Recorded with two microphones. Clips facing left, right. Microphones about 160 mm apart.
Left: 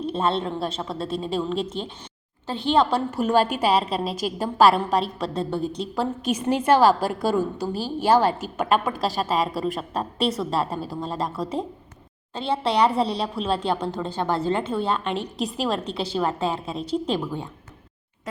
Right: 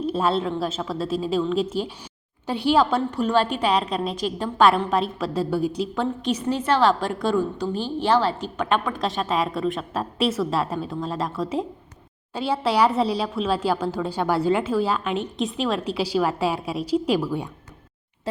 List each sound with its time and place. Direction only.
0.0 s a woman's voice: 5° right (ahead or behind)
3.4 s a woman's voice: 45° left (ahead or behind)
3.7 s a woman's voice: 5° left (ahead or behind)
6.7 s a woman's voice: 10° left (ahead or behind); by 17.2 s 10° right (ahead or behind)